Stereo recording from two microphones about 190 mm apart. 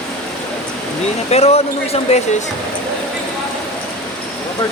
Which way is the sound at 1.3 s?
35° left (ahead or behind).